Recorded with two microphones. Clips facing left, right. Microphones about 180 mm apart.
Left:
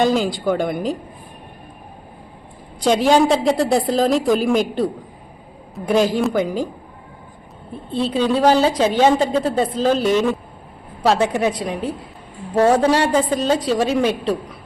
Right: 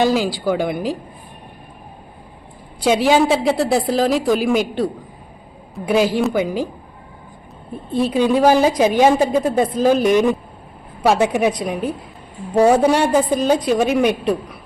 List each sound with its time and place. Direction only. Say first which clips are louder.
0.0 s a woman's voice: even; 5° right (ahead or behind)
2.8 s a woman's voice: even; 5° right (ahead or behind)
7.9 s a woman's voice: right 2 dB; 15° right (ahead or behind)